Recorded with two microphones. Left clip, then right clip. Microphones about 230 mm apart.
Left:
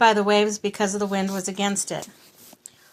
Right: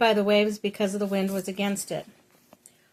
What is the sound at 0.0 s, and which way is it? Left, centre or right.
Speech, centre.